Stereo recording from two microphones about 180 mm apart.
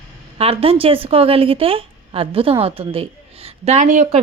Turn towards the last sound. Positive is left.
turn(degrees=-45)  # may be behind; listen again after turning